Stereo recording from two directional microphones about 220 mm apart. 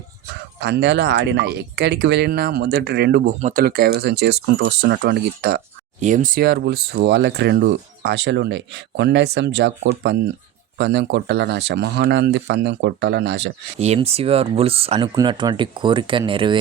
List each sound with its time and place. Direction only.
0.6 s speech: 50° right (ahead or behind)
6.0 s speech: 35° right (ahead or behind); by 13.5 s 50° right (ahead or behind)
13.7 s speech: 30° right (ahead or behind)